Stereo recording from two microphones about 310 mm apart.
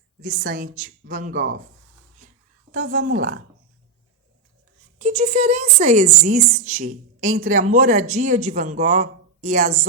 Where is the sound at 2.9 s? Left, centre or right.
Right.